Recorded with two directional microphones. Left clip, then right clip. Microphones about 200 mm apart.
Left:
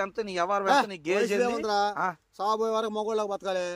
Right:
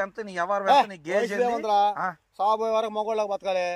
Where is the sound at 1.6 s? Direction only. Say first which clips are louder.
Right 4 dB; 35° left (ahead or behind).